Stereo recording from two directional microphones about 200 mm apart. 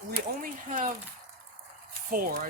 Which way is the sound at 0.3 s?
40° right (ahead or behind).